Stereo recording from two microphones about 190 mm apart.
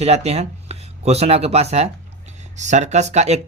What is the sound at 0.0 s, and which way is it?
Speech, 35° right (ahead or behind).